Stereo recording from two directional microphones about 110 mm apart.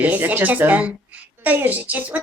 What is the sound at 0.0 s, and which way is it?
A woman's voice, 15° right (ahead or behind).